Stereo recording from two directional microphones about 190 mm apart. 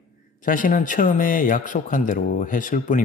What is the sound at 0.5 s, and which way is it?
A man's voice, 45° left (ahead or behind).